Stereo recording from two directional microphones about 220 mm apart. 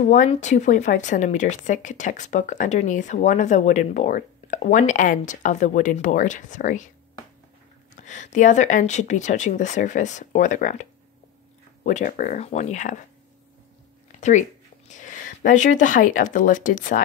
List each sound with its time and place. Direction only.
0.0 s speech: 35° left (ahead or behind)
7.9 s speech: 35° left (ahead or behind)
14.9 s speech: 35° left (ahead or behind)